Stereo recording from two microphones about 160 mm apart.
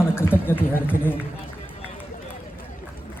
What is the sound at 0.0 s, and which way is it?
Speech, 15° left (ahead or behind).